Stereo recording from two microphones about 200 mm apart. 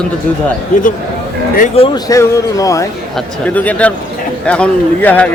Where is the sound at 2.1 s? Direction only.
15° left (ahead or behind).